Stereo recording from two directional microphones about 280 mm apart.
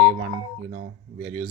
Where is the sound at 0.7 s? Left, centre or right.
Right.